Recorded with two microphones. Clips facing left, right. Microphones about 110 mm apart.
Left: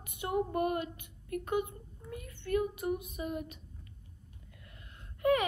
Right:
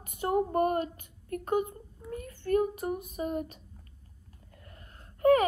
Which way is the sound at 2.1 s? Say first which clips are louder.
Right 5 dB; 40° right (ahead or behind).